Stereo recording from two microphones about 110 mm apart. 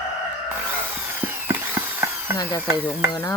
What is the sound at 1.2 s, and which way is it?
Tools, 20° right (ahead or behind).